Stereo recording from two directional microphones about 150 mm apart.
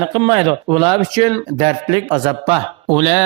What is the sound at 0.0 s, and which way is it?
Speech, 35° right (ahead or behind).